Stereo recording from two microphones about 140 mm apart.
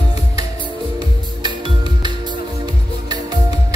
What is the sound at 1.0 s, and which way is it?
Music, 30° right (ahead or behind).